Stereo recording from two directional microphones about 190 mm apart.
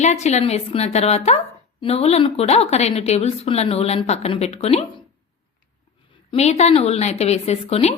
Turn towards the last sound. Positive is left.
turn(degrees=35)  # may be behind; listen again after turning